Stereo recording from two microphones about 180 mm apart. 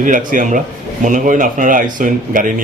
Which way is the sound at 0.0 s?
45° right (ahead or behind).